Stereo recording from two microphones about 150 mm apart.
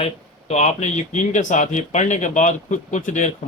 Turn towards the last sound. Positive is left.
turn(degrees=55)  # may be behind; listen again after turning